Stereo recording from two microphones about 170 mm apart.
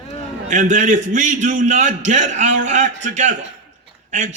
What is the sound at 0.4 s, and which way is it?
A man's voice, 50° right (ahead or behind).